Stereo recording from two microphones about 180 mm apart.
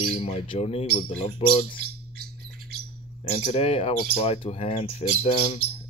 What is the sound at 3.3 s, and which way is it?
Speech, 35° left (ahead or behind).